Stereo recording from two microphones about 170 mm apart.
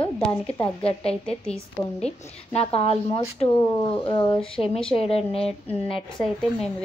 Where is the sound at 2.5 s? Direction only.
35° left (ahead or behind).